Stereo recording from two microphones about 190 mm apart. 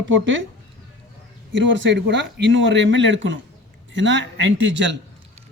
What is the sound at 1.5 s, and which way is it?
Speech, 75° right (ahead or behind).